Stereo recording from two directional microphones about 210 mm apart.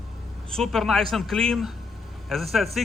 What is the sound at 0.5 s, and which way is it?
A man's voice, centre (ahead or behind).